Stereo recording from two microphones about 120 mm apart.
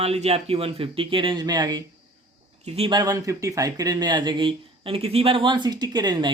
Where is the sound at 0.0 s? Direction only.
60° right (ahead or behind); by 1.8 s 35° right (ahead or behind).